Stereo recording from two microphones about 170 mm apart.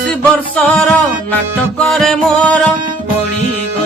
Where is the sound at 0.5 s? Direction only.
5° left (ahead or behind).